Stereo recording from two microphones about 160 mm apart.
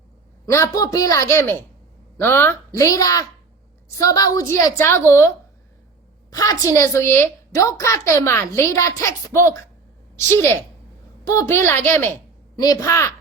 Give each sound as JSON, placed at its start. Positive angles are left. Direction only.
{"t": 0.4, "sound": "a woman's voice", "side_deg": 20}
{"t": 6.3, "sound": "a woman's voice", "side_deg": 20}
{"t": 12.5, "sound": "a woman's voice", "side_deg": 25}